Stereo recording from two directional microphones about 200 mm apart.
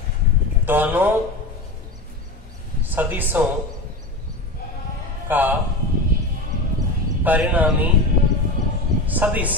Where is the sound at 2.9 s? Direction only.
10° right (ahead or behind).